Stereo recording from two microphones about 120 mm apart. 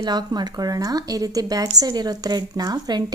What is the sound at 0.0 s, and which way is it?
A woman's voice, 35° right (ahead or behind).